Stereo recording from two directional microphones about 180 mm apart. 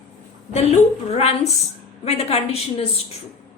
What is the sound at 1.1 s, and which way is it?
A woman's voice, 35° left (ahead or behind).